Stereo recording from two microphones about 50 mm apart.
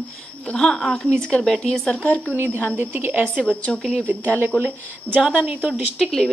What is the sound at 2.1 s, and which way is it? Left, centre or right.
Speech, left.